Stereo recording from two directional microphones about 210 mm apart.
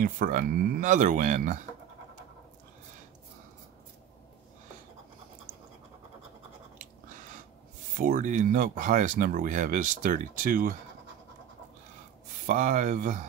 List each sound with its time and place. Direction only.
0.0 s speech: 40° right (ahead or behind)
8.0 s speech: 40° right (ahead or behind)
12.4 s speech: 35° right (ahead or behind)